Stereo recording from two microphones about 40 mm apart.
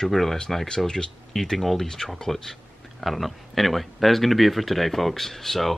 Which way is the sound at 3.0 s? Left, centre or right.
Centre.